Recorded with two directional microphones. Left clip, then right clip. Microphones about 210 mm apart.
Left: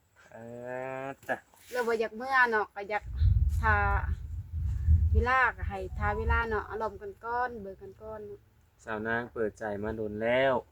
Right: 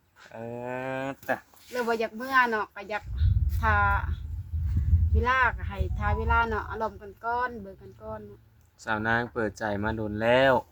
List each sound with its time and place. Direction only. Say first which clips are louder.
0.3 s a sound: right 4 dB; 60° right (ahead or behind)
1.7 s speech: right 2 dB; 10° left (ahead or behind)
5.1 s speech: right 2 dB; 10° left (ahead or behind)
8.8 s speech: right 6 dB; 50° right (ahead or behind)